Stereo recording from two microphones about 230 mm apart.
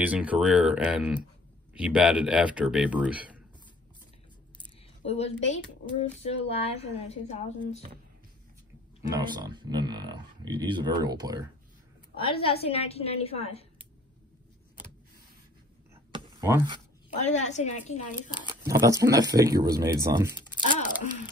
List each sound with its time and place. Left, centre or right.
0.0 s speech: centre
5.0 s a woman's voice: left
9.1 s speech: centre
12.2 s a woman's voice: left
15.9 s a sound: centre
17.3 s speech: left
18.5 s speech: centre